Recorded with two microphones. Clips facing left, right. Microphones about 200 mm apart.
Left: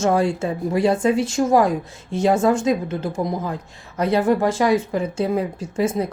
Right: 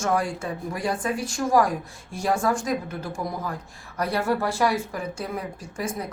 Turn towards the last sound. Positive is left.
turn(degrees=25)  # may be behind; listen again after turning